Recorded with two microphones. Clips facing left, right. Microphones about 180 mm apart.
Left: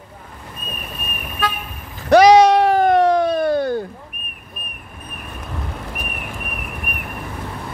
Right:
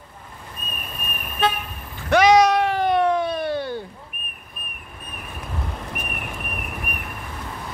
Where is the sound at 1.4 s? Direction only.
25° right (ahead or behind).